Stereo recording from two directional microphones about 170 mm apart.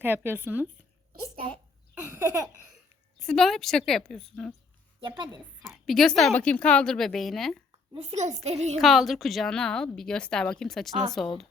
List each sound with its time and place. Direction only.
0.0 s speech: 10° right (ahead or behind)
2.1 s laughter: 20° right (ahead or behind)
3.2 s a woman's voice: 5° left (ahead or behind)
5.0 s laughter: 25° right (ahead or behind)
5.4 s a woman's voice: centre (ahead or behind)
7.9 s a child's voice: 45° right (ahead or behind)
8.8 s a woman's voice: centre (ahead or behind)